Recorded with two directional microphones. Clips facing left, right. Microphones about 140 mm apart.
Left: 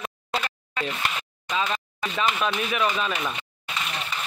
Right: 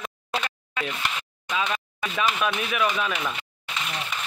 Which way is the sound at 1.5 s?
Centre (ahead or behind).